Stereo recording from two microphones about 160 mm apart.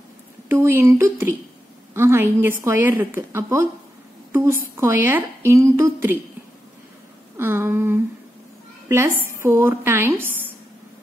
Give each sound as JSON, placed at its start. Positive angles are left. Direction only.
{"t": 0.5, "sound": "a woman's voice", "side_deg": -15}
{"t": 7.3, "sound": "a sound", "side_deg": -15}
{"t": 8.8, "sound": "a woman's voice", "side_deg": -15}